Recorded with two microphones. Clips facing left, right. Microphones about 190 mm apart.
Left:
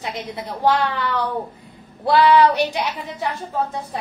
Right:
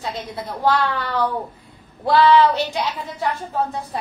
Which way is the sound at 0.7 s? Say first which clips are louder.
Left 1 dB; 15° left (ahead or behind).